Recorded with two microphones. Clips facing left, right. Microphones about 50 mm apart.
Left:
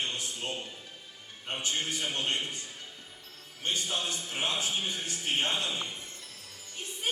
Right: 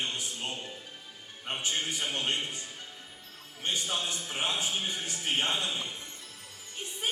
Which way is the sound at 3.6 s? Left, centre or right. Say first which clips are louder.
Even; right.